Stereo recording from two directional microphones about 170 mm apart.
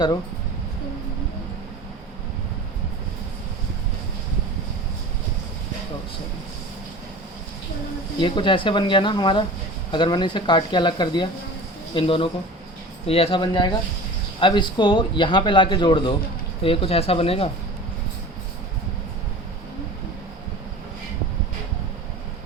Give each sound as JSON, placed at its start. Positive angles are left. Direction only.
{"t": 8.2, "sound": "speech", "side_deg": 30}